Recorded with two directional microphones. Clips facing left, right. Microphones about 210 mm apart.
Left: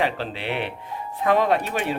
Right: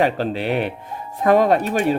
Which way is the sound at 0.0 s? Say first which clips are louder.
Right 6 dB; 45° right (ahead or behind).